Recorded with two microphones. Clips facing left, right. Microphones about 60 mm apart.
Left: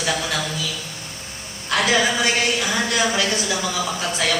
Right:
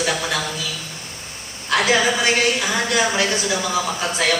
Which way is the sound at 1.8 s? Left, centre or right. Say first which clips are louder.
Right 1 dB; right.